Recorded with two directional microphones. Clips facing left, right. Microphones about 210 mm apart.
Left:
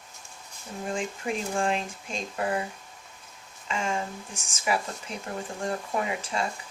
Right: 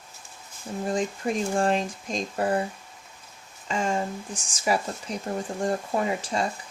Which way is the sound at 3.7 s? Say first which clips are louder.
Right 4 dB; 35° right (ahead or behind).